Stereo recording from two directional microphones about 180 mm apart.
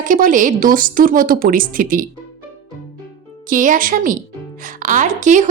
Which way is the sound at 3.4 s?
45° right (ahead or behind).